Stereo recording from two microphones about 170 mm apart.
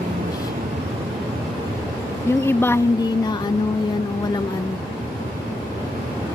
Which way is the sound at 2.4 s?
15° left (ahead or behind).